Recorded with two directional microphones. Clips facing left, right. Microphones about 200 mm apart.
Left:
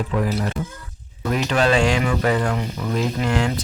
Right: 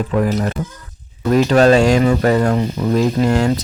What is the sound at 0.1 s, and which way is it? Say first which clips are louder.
Speech: right 5 dB; 45° right (ahead or behind).